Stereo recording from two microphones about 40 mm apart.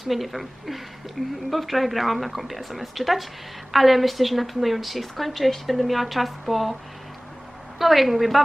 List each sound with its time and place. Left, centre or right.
0.0 s a woman's voice: centre
7.8 s a woman's voice: centre